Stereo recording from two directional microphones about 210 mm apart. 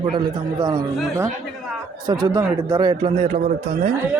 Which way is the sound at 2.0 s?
20° right (ahead or behind).